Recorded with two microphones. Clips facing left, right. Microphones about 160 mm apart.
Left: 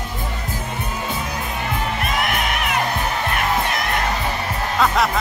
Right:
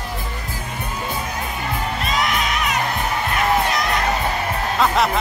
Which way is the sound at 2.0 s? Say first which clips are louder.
Right 2 dB; 55° left (ahead or behind).